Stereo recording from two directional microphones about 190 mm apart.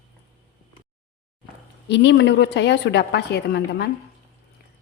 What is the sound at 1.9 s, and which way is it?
A woman's voice, 70° left (ahead or behind).